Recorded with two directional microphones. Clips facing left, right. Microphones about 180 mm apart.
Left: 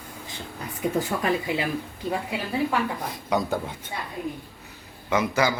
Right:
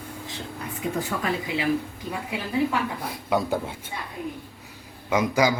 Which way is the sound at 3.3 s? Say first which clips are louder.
Right 1 dB; 10° right (ahead or behind).